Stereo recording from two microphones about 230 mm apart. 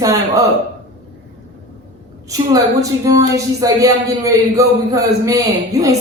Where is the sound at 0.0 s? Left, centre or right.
Centre.